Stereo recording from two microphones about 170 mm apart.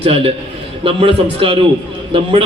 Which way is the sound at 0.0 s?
35° right (ahead or behind).